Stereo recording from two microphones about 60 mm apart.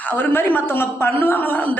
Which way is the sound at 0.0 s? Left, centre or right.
Left.